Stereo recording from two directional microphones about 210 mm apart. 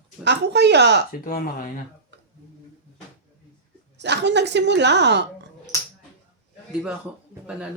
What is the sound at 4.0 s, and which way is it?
A woman's voice, 55° right (ahead or behind).